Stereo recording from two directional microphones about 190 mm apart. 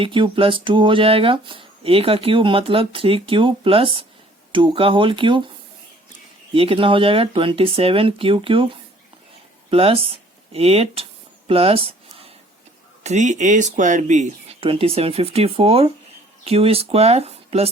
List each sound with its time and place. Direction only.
0.0 s speech: 25° right (ahead or behind)
6.5 s speech: 30° right (ahead or behind)
11.4 s a sound: 30° right (ahead or behind)
13.0 s speech: 40° right (ahead or behind)